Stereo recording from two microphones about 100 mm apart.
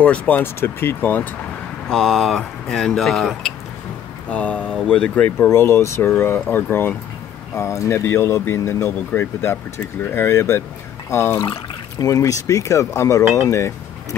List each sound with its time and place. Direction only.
0.0 s speech: 15° left (ahead or behind)
1.9 s speech: 5° left (ahead or behind)
5.5 s speech: 25° left (ahead or behind)